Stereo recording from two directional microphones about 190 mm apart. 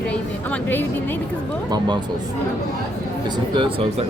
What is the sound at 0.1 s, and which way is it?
A woman's voice, 10° left (ahead or behind).